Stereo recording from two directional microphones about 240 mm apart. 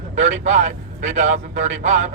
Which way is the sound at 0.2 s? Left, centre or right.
Right.